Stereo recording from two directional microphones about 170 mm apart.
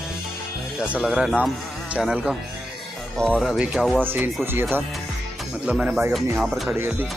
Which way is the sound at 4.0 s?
10° right (ahead or behind).